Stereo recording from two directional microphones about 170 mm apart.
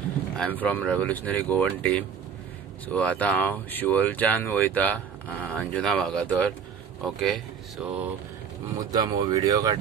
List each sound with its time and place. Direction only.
0.4 s speech: 10° left (ahead or behind)
8.9 s speech: 25° right (ahead or behind)